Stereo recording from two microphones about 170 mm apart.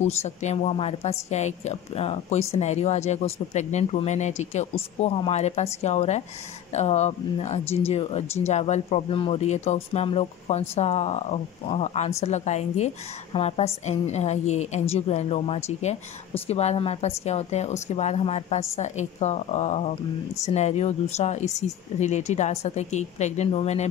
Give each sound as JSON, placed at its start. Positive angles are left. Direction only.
{"t": 0.0, "sound": "a woman's voice", "side_deg": 40}